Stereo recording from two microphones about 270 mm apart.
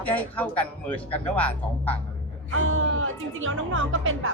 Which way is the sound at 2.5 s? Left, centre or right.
Right.